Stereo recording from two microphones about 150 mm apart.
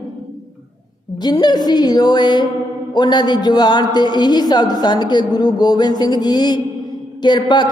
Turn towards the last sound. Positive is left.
turn(degrees=30)  # may be behind; listen again after turning